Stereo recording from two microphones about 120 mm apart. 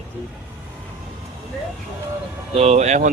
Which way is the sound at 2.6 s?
65° right (ahead or behind).